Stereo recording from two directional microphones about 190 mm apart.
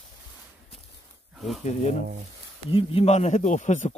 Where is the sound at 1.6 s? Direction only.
35° left (ahead or behind).